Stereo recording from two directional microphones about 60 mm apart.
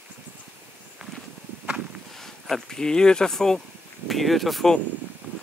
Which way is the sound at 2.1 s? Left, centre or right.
Centre.